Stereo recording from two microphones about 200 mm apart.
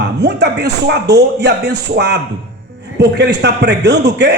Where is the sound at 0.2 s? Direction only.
60° right (ahead or behind).